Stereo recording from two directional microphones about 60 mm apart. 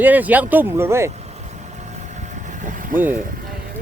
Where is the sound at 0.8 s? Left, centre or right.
Right.